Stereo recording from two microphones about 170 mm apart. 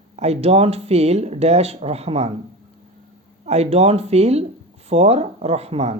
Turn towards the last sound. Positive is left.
turn(degrees=-40)  # may be behind; listen again after turning